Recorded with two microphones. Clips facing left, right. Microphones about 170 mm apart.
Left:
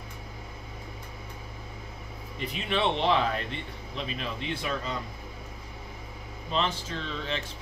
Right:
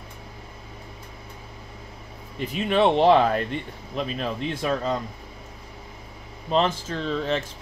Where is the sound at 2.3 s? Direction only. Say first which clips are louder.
Right 7 dB; 45° right (ahead or behind).